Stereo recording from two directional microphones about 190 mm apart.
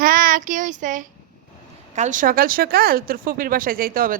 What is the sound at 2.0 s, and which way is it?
Speech, 40° right (ahead or behind).